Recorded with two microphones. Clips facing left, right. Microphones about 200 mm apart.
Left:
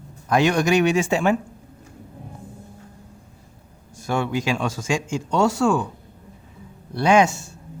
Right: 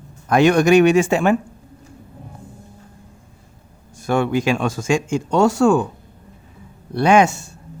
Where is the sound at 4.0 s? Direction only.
55° right (ahead or behind).